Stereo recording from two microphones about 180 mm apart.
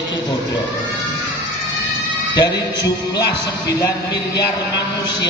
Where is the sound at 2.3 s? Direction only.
20° left (ahead or behind).